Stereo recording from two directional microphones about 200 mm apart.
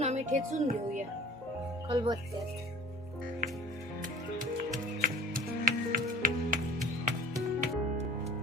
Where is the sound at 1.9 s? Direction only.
20° right (ahead or behind).